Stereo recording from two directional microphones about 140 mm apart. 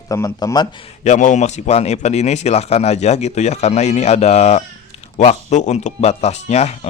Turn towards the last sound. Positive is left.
turn(degrees=50)  # may be behind; listen again after turning